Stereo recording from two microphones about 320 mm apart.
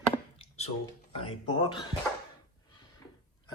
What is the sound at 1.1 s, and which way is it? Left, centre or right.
Speech, centre.